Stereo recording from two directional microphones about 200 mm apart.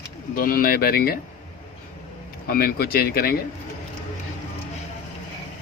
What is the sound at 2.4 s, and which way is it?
Speech, 50° left (ahead or behind).